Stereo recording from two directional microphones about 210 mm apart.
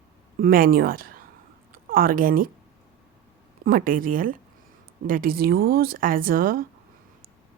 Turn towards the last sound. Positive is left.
turn(degrees=-45)  # may be behind; listen again after turning